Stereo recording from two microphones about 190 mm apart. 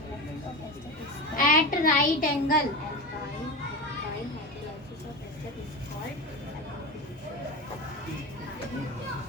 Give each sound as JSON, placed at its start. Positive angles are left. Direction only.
{"t": 1.4, "sound": "a child's voice", "side_deg": 45}